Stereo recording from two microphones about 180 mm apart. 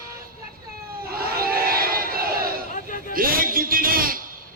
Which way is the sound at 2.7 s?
50° left (ahead or behind).